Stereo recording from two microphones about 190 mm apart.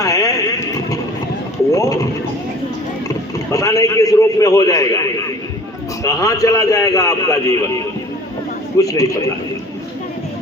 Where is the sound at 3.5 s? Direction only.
15° left (ahead or behind).